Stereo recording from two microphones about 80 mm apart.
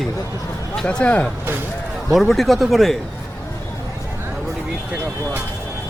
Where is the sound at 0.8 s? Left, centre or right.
Centre.